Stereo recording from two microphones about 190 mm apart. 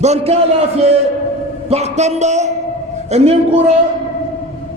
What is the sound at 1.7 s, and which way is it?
A man's voice, 35° right (ahead or behind).